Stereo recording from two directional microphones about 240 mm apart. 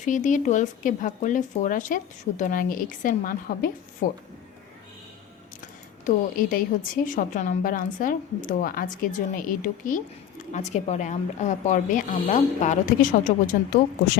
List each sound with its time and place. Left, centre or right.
0.0 s speech: left
6.1 s speech: left